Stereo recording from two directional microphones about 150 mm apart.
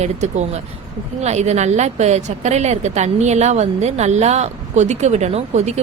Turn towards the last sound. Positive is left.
turn(degrees=-45)  # may be behind; listen again after turning